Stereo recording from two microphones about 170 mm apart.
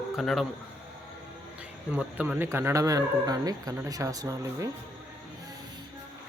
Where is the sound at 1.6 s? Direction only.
5° right (ahead or behind).